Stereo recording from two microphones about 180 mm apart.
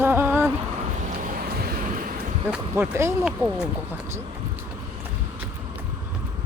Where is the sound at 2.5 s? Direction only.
15° right (ahead or behind).